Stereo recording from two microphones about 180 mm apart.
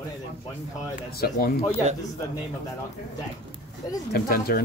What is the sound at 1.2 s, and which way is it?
Speech, 55° left (ahead or behind).